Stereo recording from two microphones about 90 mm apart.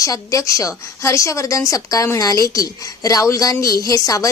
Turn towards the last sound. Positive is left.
turn(degrees=40)  # may be behind; listen again after turning